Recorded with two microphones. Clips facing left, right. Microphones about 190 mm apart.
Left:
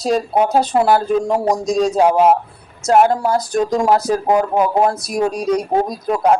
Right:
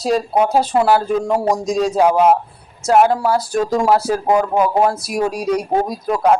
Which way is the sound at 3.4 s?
5° right (ahead or behind).